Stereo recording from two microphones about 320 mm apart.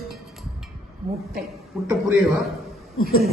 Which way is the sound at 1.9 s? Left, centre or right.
Centre.